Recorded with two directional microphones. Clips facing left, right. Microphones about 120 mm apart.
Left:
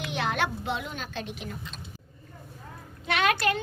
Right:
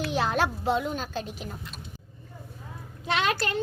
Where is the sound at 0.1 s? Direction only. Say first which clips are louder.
Right 1 dB; 35° right (ahead or behind).